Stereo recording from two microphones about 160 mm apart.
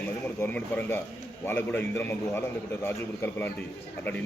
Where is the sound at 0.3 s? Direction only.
15° left (ahead or behind).